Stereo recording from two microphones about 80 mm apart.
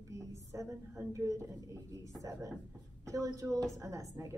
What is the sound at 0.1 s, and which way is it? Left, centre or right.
A woman's voice, right.